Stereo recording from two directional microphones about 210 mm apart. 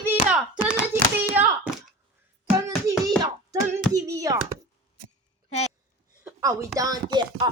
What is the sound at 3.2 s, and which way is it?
Speech, 15° right (ahead or behind).